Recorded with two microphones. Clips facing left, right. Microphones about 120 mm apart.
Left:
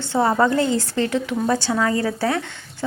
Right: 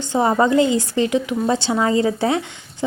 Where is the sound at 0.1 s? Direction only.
15° right (ahead or behind).